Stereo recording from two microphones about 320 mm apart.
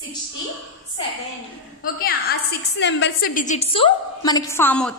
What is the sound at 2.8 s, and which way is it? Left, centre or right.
A woman's voice, left.